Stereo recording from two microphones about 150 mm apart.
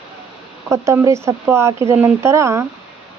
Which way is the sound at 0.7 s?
20° right (ahead or behind).